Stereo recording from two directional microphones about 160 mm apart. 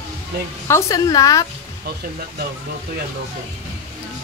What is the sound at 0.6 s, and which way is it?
Speech, 15° left (ahead or behind).